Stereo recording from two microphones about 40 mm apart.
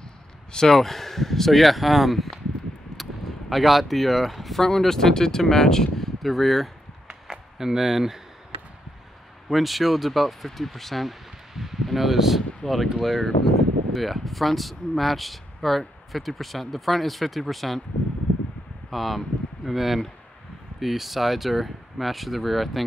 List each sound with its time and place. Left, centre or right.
0.5 s speech: centre
0.7 s speech: centre
7.1 s a sound: centre
9.5 s speech: centre
11.5 s speech: centre
18.9 s speech: centre